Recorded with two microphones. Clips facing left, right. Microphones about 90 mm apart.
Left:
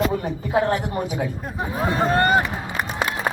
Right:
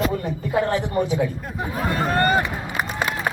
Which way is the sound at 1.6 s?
20° left (ahead or behind).